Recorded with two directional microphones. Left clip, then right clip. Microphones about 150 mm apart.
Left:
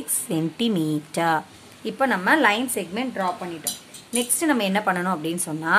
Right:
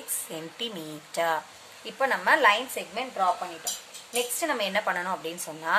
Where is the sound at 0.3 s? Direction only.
50° left (ahead or behind).